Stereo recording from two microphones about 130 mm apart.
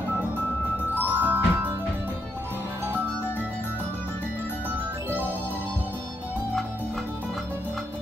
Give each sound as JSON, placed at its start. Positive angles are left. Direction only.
{"t": 1.1, "sound": "music", "side_deg": -15}